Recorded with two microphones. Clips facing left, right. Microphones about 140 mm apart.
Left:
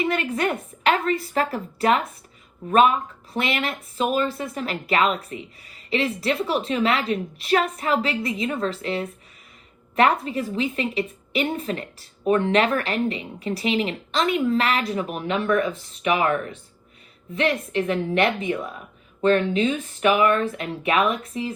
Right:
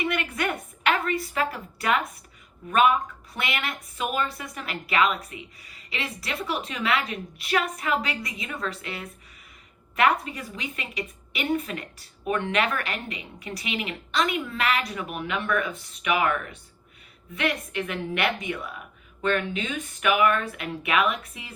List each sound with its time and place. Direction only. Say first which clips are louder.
0.0 s a woman's voice: left 4 dB; 35° left (ahead or behind)